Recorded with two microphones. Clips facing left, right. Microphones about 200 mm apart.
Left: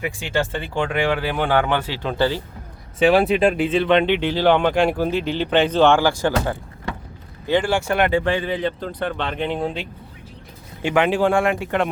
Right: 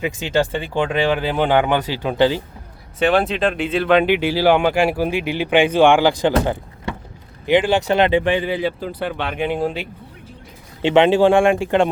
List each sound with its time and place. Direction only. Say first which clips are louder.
0.0 s speech: right 4 dB; 20° right (ahead or behind)
3.0 s speech: left 2 dB; centre (ahead or behind); by 6.3 s 15° right (ahead or behind)
7.4 s speech: right 4 dB; 15° right (ahead or behind)
10.8 s speech: right 5 dB; 25° right (ahead or behind)